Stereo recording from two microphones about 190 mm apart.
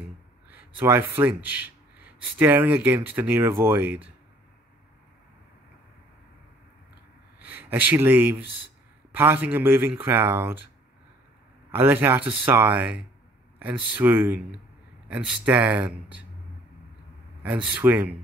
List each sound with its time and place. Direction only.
0.5 s speech: 10° right (ahead or behind)
7.3 s speech: 10° right (ahead or behind)
11.7 s speech: 10° right (ahead or behind)
17.6 s speech: 10° right (ahead or behind)